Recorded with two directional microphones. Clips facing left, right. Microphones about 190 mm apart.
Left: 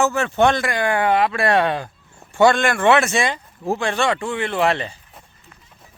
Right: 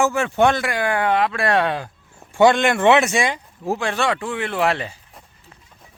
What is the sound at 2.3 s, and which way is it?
Speech, 15° right (ahead or behind).